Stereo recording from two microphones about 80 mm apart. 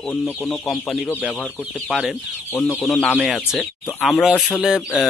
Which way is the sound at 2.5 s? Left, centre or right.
Left.